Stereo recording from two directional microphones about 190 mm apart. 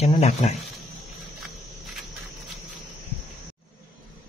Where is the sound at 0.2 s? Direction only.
35° left (ahead or behind).